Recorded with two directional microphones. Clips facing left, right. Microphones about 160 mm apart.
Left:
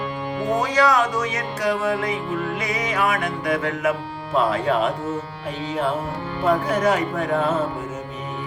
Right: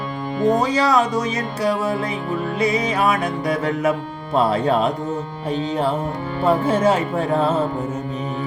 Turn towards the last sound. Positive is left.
turn(degrees=-30)  # may be behind; listen again after turning